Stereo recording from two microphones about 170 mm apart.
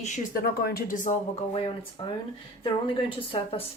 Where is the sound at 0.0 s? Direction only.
55° left (ahead or behind).